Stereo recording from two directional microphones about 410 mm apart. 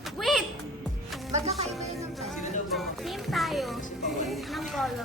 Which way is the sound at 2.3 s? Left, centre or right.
Centre.